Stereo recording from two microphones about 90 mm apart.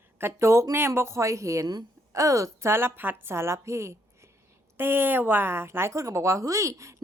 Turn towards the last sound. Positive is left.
turn(degrees=-35)  # may be behind; listen again after turning